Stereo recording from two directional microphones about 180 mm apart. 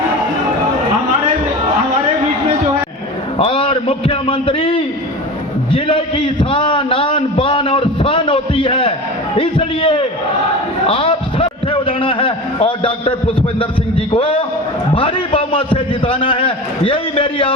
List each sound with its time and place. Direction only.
3.3 s a man's voice: 30° left (ahead or behind)
5.7 s a sound: 30° left (ahead or behind)
14.9 s a man's voice: 30° left (ahead or behind)